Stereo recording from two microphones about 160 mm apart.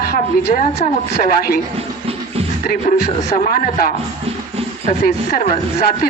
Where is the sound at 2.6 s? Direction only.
60° left (ahead or behind).